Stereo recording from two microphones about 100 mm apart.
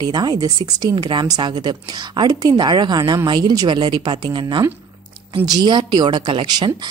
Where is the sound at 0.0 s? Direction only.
45° right (ahead or behind).